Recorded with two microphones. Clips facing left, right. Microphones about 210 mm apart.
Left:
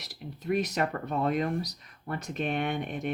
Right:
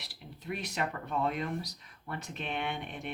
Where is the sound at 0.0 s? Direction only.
45° left (ahead or behind).